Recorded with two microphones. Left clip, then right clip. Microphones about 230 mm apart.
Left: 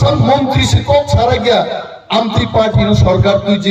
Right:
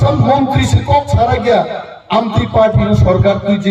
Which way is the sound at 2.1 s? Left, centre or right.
Left.